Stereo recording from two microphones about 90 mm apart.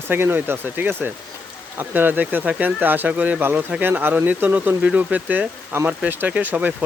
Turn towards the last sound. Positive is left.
turn(degrees=-20)  # may be behind; listen again after turning